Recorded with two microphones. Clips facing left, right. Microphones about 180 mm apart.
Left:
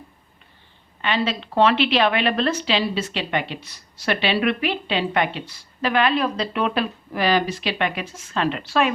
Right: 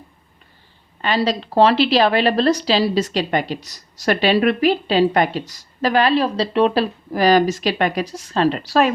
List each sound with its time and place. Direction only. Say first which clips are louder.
1.0 s a woman's voice: right 4 dB; 40° right (ahead or behind)